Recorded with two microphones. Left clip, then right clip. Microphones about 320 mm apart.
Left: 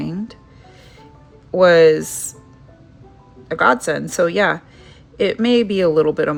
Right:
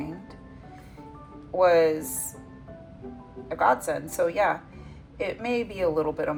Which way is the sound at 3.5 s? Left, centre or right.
Left.